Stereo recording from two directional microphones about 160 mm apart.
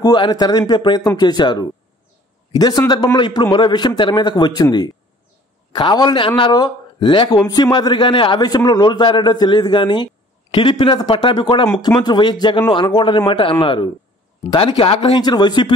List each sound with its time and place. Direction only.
0.0 s speech: 25° left (ahead or behind)